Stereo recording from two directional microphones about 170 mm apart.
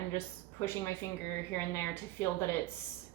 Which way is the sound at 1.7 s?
15° left (ahead or behind).